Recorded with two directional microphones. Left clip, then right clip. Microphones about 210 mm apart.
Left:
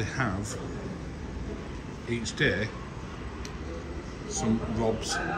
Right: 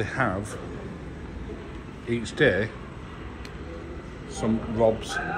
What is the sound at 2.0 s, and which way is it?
Speech, 5° right (ahead or behind).